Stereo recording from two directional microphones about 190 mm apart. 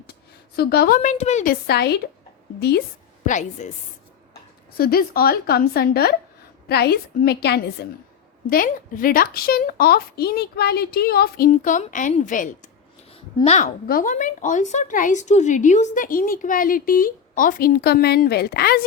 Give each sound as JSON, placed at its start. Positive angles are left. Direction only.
{"t": 0.5, "sound": "a woman's voice", "side_deg": 55}
{"t": 1.0, "sound": "a woman's voice", "side_deg": 35}
{"t": 1.6, "sound": "a woman's voice", "side_deg": 60}
{"t": 3.2, "sound": "a woman's voice", "side_deg": 40}
{"t": 4.8, "sound": "a woman's voice", "side_deg": 55}
{"t": 8.4, "sound": "a woman's voice", "side_deg": 50}
{"t": 13.8, "sound": "a woman's voice", "side_deg": 45}